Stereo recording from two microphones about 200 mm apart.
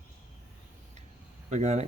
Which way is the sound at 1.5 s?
35° right (ahead or behind).